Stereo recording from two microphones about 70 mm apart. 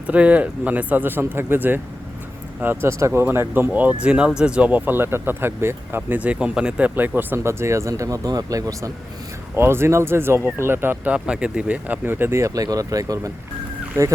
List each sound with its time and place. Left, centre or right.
0.1 s speech: right
4.9 s speech: right
6.1 s speech: centre; by 8.9 s right
9.6 s speech: right
11.1 s speech: centre
12.0 s speech: right